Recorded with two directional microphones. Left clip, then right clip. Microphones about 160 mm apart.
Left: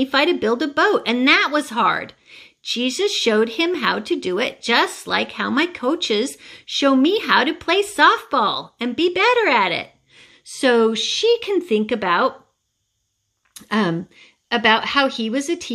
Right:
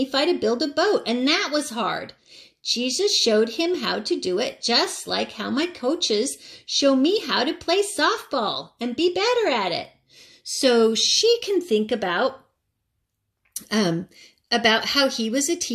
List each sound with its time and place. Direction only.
0.0 s speech: 15° left (ahead or behind)
13.6 s speech: centre (ahead or behind)